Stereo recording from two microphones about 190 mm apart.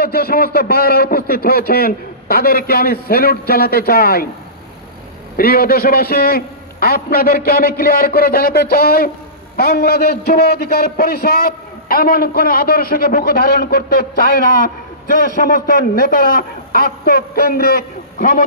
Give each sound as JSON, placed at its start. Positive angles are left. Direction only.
{"t": 0.0, "sound": "a man's voice", "side_deg": 55}
{"t": 5.4, "sound": "a man's voice", "side_deg": 50}